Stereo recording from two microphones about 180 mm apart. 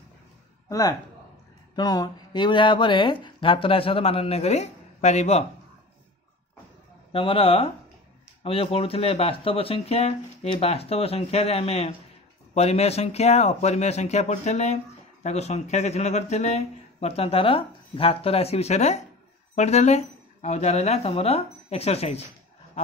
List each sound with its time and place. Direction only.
0.7 s speech: 20° left (ahead or behind); by 5.4 s 40° left (ahead or behind)
7.1 s speech: 30° left (ahead or behind)